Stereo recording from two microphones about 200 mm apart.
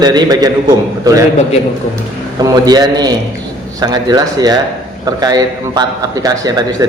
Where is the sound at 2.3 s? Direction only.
20° right (ahead or behind).